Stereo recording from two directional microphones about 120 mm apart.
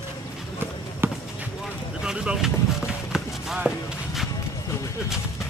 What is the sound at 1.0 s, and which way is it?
Basketball bounce, 20° right (ahead or behind).